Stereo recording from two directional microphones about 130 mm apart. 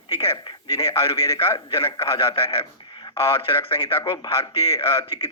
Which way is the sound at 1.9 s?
45° left (ahead or behind).